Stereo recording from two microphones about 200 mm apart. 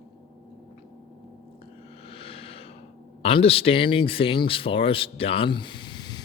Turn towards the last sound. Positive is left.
turn(degrees=20)  # may be behind; listen again after turning